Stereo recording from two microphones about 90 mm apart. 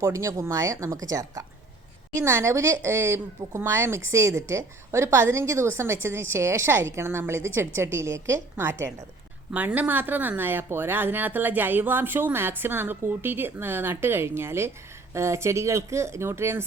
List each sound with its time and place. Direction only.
0.0 s a woman's voice: 35° right (ahead or behind)
9.5 s a woman's voice: 15° right (ahead or behind)